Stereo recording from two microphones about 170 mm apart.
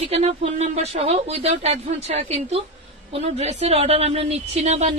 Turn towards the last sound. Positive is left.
turn(degrees=-40)  # may be behind; listen again after turning